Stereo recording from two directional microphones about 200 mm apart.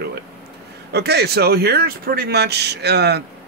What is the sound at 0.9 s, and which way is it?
Speech, 55° right (ahead or behind).